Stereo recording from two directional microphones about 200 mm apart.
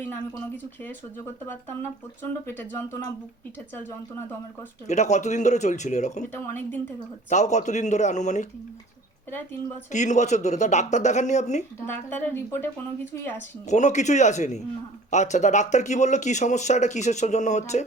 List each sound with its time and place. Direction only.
0.1 s speech: 10° left (ahead or behind)
4.9 s speech: 35° left (ahead or behind)
6.3 s speech: 10° left (ahead or behind)
7.3 s speech: 35° left (ahead or behind)
9.9 s speech: 35° left (ahead or behind)
11.9 s speech: 10° left (ahead or behind)
13.7 s speech: 35° left (ahead or behind)